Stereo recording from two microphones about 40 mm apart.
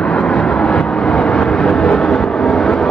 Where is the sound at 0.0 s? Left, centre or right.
Left.